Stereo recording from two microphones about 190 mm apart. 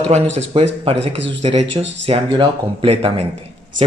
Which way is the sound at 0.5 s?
30° right (ahead or behind).